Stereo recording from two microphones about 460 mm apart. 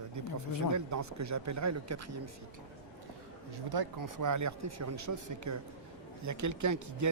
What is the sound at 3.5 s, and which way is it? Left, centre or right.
Speech, right.